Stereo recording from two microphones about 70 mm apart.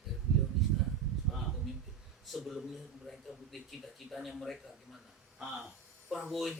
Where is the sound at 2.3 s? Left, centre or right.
Centre.